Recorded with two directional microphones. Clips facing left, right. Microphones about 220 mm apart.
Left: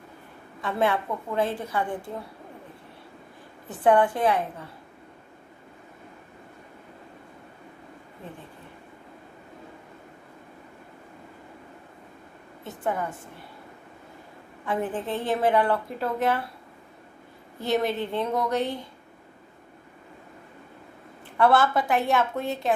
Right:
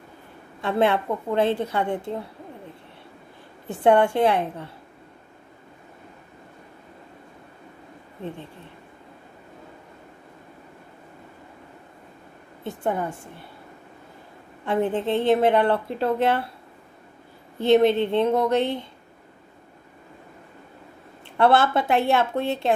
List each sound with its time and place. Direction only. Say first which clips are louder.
0.6 s a woman's voice: right 4 dB; 25° right (ahead or behind)
3.6 s a woman's voice: right 2 dB; 25° right (ahead or behind)
14.7 s a woman's voice: right 6 dB; 25° right (ahead or behind)
17.6 s a woman's voice: right 8 dB; 25° right (ahead or behind)
21.4 s a woman's voice: right 2 dB; 25° right (ahead or behind)